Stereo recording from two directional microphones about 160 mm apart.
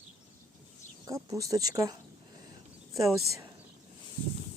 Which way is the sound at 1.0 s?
20° right (ahead or behind).